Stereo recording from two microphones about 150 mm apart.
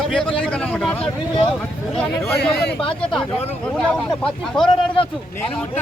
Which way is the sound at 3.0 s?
5° left (ahead or behind).